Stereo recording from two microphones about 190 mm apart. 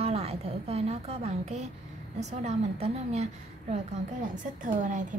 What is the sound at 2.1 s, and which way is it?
A woman's voice, 35° right (ahead or behind).